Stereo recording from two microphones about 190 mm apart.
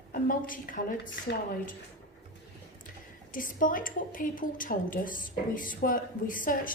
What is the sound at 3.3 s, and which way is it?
Speech, 45° left (ahead or behind).